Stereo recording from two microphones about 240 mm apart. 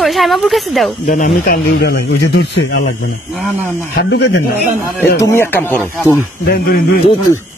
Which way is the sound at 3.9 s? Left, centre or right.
Left.